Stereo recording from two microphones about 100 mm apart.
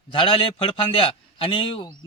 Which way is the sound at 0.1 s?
60° left (ahead or behind).